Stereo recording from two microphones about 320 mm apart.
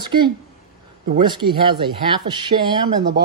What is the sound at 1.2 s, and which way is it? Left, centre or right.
Speech, centre.